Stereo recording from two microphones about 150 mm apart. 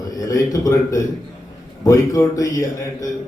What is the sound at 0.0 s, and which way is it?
A man's voice, 25° left (ahead or behind).